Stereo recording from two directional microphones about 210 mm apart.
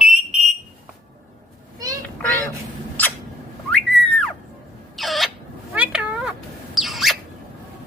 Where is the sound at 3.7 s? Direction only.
5° left (ahead or behind).